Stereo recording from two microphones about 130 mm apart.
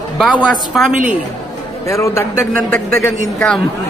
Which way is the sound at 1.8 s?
20° left (ahead or behind).